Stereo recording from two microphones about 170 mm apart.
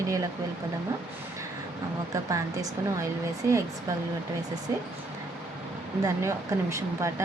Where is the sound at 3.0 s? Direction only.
15° right (ahead or behind).